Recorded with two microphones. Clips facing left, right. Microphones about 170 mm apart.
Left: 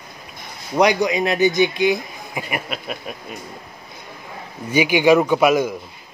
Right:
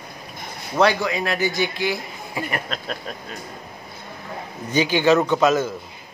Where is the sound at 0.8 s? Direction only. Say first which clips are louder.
Left 3 dB; 15° left (ahead or behind).